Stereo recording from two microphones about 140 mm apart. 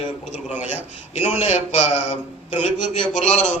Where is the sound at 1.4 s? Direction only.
50° left (ahead or behind).